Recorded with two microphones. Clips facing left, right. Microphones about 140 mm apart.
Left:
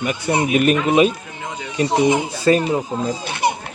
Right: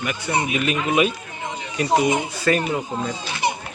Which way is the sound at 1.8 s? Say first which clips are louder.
Left 3 dB; 30° left (ahead or behind).